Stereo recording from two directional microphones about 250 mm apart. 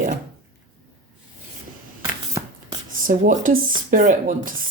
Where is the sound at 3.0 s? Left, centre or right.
Right.